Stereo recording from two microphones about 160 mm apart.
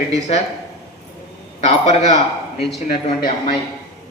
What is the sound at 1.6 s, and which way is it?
A man's voice, 45° left (ahead or behind).